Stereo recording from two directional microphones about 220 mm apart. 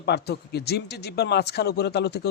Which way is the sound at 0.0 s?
50° left (ahead or behind).